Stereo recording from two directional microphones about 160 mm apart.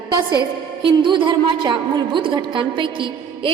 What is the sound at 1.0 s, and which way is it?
A woman's voice, 30° right (ahead or behind).